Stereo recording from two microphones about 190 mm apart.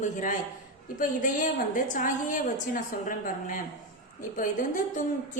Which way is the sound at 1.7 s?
45° left (ahead or behind).